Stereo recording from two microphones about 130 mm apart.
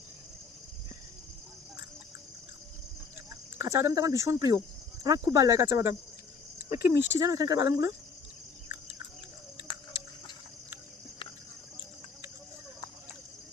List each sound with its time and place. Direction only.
3.6 s speech: 20° right (ahead or behind)